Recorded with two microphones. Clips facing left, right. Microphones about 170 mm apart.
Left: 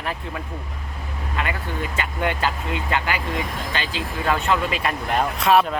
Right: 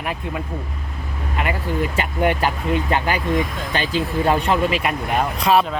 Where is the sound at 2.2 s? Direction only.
20° right (ahead or behind).